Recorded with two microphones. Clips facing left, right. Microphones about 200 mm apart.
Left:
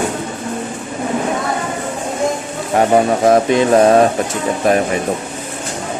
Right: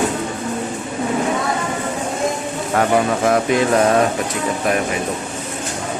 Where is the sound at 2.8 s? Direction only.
30° left (ahead or behind).